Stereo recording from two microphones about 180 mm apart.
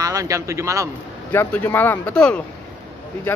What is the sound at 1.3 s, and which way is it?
Speech, 10° left (ahead or behind).